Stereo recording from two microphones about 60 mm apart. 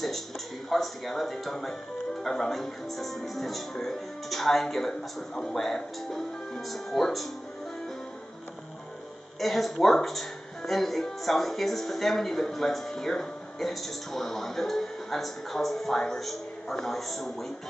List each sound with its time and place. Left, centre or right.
0.7 s speech: centre
9.4 s speech: centre